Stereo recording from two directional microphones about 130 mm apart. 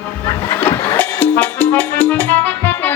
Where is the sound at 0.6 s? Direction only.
15° left (ahead or behind).